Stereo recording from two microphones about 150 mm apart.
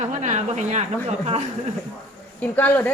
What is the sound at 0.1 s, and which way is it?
A woman's voice, 55° right (ahead or behind).